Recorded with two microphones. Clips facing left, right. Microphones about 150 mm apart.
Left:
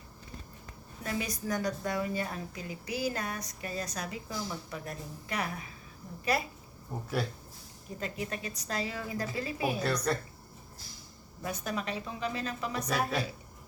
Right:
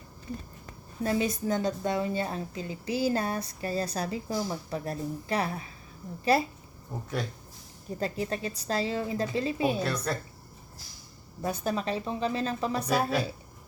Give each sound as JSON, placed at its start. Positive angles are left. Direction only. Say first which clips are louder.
{"t": 1.0, "sound": "a woman's voice", "louder": "right 7 dB", "side_deg": -25}
{"t": 6.9, "sound": "speech", "louder": "right 1 dB", "side_deg": 0}
{"t": 7.9, "sound": "a woman's voice", "louder": "right 6 dB", "side_deg": -35}
{"t": 10.1, "sound": "speech", "louder": "left 1 dB", "side_deg": 0}
{"t": 11.4, "sound": "a woman's voice", "louder": "right 5 dB", "side_deg": -30}